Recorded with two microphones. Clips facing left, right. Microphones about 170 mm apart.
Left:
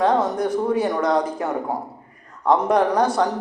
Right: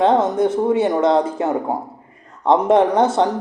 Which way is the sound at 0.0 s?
25° right (ahead or behind).